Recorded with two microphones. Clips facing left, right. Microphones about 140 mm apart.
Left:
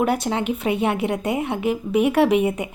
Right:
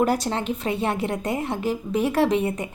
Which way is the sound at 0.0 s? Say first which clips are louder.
Left 1 dB; centre (ahead or behind).